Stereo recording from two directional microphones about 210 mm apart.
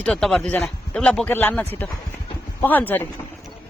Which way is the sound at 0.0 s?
5° left (ahead or behind).